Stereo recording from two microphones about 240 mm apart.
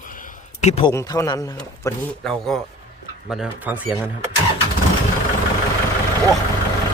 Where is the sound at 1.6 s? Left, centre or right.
Centre.